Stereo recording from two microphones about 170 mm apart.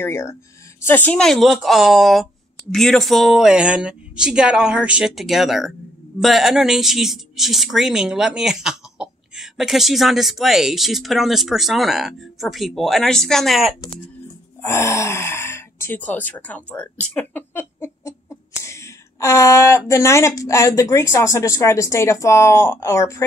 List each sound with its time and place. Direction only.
0.0 s a woman's voice: 15° left (ahead or behind)
14.6 s speech: 15° left (ahead or behind)